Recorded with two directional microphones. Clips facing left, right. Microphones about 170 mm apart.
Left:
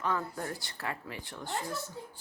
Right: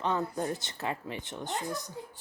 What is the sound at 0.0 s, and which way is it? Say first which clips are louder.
A woman's voice: right 3 dB; 20° right (ahead or behind).